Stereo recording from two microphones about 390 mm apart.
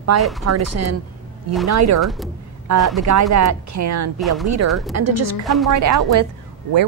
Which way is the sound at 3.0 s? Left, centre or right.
Right.